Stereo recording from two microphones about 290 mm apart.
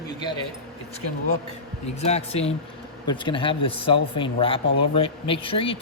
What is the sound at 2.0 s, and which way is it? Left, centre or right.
Speech, left.